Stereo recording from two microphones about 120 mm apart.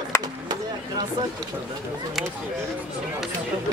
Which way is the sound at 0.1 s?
20° left (ahead or behind).